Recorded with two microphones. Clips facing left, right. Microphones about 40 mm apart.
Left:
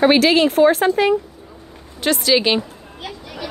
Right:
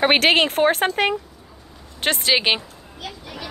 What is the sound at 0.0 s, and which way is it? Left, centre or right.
Speech, right.